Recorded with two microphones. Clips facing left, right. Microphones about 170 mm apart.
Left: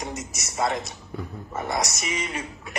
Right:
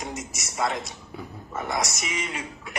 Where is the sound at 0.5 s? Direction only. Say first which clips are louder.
Left 2 dB; 20° left (ahead or behind).